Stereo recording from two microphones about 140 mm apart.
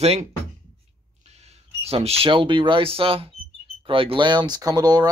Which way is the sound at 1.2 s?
50° right (ahead or behind).